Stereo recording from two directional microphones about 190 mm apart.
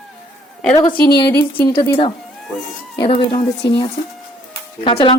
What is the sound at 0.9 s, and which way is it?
Speech, 55° left (ahead or behind).